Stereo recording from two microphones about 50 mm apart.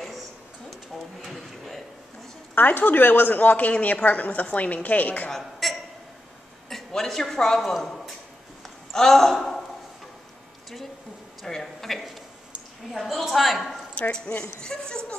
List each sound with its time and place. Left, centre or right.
1.2 s drawer open or close: centre
2.5 s a woman's voice: left
5.3 s a sound: centre
6.9 s a man's voice: centre
11.4 s a woman's voice: centre
14.3 s a man's voice: centre